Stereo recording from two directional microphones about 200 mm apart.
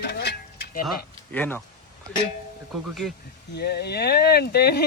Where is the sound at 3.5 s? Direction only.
55° left (ahead or behind).